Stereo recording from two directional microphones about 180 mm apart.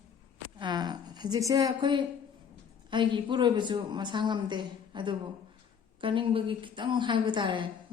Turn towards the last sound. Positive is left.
turn(degrees=-25)  # may be behind; listen again after turning